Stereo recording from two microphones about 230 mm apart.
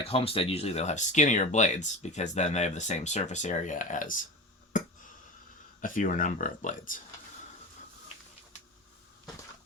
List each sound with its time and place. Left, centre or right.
0.0 s speech: left
4.7 s a sound: left
5.8 s speech: left